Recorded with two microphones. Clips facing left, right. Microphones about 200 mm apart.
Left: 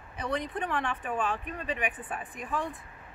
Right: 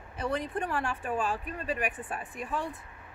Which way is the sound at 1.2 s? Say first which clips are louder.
Even; 30° right (ahead or behind).